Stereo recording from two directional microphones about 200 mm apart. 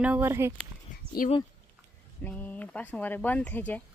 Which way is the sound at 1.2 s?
45° left (ahead or behind).